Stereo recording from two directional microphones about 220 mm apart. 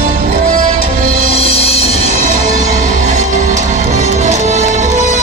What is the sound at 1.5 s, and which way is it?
Music, 25° left (ahead or behind).